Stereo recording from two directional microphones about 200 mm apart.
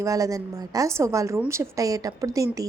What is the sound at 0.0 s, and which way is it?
A woman's voice, 15° right (ahead or behind).